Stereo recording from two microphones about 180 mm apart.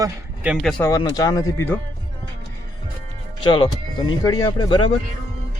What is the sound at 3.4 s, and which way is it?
Speech, 25° left (ahead or behind).